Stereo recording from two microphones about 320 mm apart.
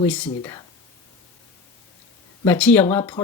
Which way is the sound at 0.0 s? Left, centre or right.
Centre.